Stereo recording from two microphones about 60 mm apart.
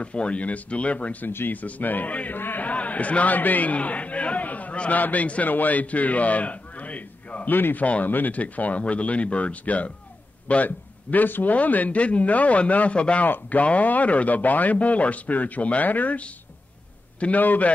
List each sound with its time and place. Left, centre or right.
0.0 s a man's voice: centre